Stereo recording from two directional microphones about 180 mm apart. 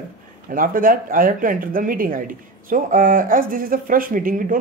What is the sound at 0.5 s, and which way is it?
Speech, 50° right (ahead or behind).